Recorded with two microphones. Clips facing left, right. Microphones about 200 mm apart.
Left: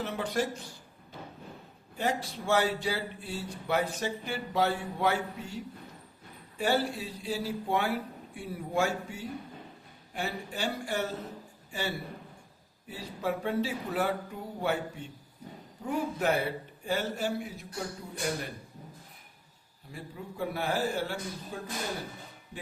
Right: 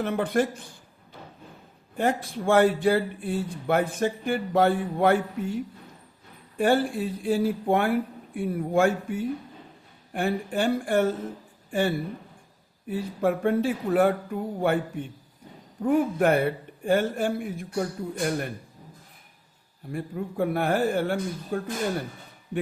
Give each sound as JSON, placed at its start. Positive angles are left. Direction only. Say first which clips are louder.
{"t": 0.0, "sound": "speech", "louder": "right 7 dB", "side_deg": -55}
{"t": 2.0, "sound": "speech", "louder": "right 6 dB", "side_deg": -50}
{"t": 6.6, "sound": "a man's voice", "louder": "right 6 dB", "side_deg": -50}
{"t": 19.9, "sound": "speech", "louder": "right 10 dB", "side_deg": -55}